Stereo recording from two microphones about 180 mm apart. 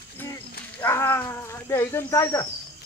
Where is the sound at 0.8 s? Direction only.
10° left (ahead or behind).